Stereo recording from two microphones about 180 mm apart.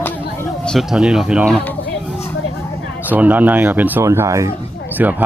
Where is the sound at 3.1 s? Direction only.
10° right (ahead or behind).